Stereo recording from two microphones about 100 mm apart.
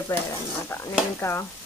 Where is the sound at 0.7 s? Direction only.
25° left (ahead or behind).